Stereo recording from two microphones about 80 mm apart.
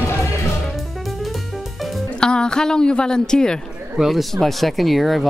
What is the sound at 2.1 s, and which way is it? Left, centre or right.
A woman's voice, centre.